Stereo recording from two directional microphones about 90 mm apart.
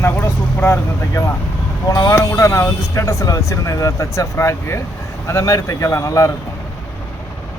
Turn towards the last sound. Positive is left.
turn(degrees=35)  # may be behind; listen again after turning